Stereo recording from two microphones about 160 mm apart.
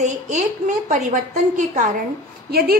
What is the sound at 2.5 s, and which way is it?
Speech, 70° right (ahead or behind).